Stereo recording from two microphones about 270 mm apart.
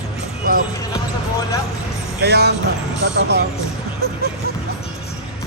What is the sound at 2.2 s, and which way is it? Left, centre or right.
Music, right.